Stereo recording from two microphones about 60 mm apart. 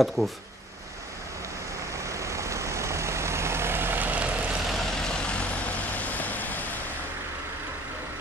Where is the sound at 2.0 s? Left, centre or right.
Right.